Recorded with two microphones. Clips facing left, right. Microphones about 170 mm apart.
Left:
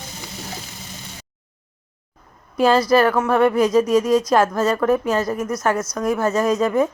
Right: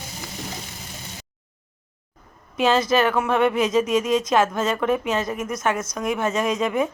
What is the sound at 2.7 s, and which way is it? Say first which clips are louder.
Speech: left 4 dB; 25° right (ahead or behind).